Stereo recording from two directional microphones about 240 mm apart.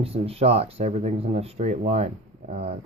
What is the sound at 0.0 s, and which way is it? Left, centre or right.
Speech, right.